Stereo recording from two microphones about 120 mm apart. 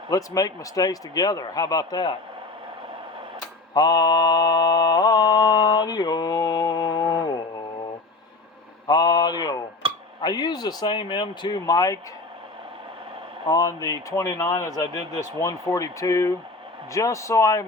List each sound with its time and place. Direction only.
0.1 s speech: 30° left (ahead or behind)
3.8 s mantra: 35° left (ahead or behind)
8.9 s speech: 35° left (ahead or behind)
9.8 s a sound: 50° right (ahead or behind)
10.2 s speech: 35° left (ahead or behind)
13.5 s speech: 30° left (ahead or behind)